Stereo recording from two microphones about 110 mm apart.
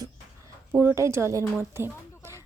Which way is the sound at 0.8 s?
25° right (ahead or behind).